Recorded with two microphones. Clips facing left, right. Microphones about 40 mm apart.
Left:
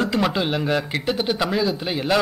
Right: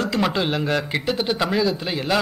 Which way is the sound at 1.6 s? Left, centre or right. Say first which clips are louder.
Right 1 dB; centre.